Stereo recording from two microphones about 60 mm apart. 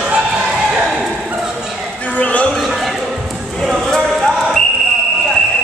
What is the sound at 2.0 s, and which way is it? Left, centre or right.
Opera, left.